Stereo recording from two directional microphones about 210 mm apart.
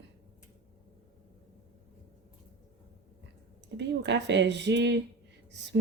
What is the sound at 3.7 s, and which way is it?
A woman's voice, 55° right (ahead or behind).